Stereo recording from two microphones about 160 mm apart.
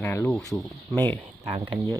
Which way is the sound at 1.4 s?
40° right (ahead or behind).